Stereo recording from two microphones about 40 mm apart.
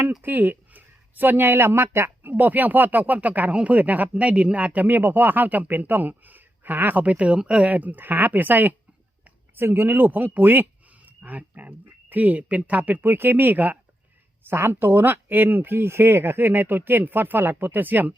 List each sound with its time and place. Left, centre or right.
0.2 s speech: right
1.5 s speech: right
4.9 s speech: right
7.0 s speech: right
7.7 s speech: right
9.6 s speech: right
11.2 s speech: right
13.0 s speech: right
14.4 s speech: right
15.7 s speech: right